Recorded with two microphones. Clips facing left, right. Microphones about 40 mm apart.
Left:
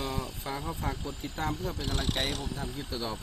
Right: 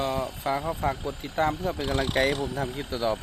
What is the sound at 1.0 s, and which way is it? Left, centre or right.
Speech, right.